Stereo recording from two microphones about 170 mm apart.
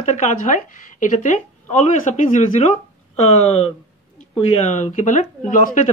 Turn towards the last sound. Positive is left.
turn(degrees=45)  # may be behind; listen again after turning